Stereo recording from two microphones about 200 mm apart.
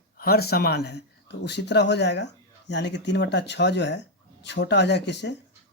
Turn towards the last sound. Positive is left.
turn(degrees=60)  # may be behind; listen again after turning